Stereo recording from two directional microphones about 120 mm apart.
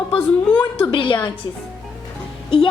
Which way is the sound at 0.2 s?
15° left (ahead or behind).